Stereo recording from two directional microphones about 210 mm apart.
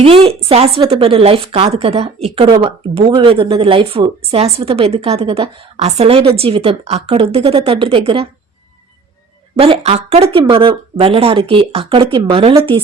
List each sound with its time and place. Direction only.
0.0 s a woman's voice: 25° right (ahead or behind)
9.6 s a woman's voice: 30° right (ahead or behind)